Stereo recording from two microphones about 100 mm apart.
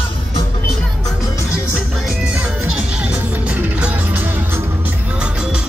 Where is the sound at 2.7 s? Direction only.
10° right (ahead or behind).